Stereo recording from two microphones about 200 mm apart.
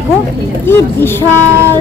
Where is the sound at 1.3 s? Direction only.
10° right (ahead or behind).